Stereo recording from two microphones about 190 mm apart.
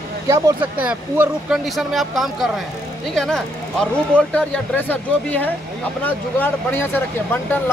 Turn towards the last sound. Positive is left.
turn(degrees=10)  # may be behind; listen again after turning